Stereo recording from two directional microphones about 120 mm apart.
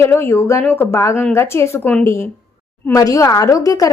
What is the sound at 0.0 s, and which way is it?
A woman's voice, 20° left (ahead or behind).